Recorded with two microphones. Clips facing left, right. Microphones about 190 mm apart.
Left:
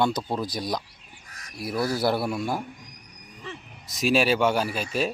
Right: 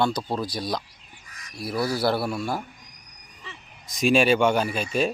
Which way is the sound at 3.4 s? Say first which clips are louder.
Left 6 dB; 50° left (ahead or behind).